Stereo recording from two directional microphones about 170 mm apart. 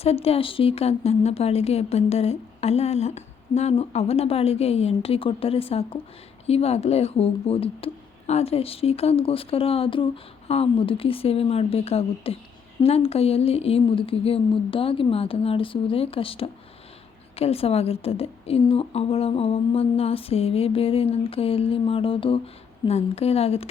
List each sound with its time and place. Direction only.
0.0 s speech: 35° left (ahead or behind)